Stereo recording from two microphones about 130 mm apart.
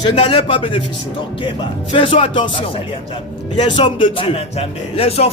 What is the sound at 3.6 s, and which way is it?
Speech, 35° left (ahead or behind).